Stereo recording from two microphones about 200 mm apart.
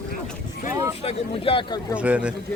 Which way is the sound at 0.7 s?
15° right (ahead or behind).